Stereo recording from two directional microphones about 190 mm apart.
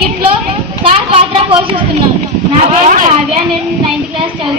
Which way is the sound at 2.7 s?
40° right (ahead or behind).